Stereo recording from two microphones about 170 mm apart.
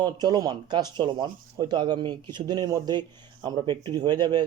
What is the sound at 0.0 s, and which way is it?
Speech, 25° right (ahead or behind).